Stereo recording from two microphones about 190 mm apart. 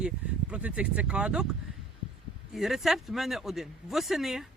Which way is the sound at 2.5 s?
Centre (ahead or behind).